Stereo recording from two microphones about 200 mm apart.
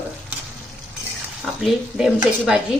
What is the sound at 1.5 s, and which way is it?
Speech, centre (ahead or behind).